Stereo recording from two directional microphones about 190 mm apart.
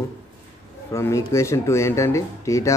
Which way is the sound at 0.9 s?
15° left (ahead or behind).